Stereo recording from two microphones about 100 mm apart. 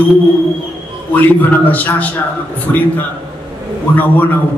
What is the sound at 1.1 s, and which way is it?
A man's voice, 15° left (ahead or behind).